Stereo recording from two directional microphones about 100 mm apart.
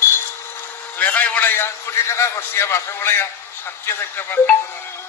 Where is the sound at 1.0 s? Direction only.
15° left (ahead or behind).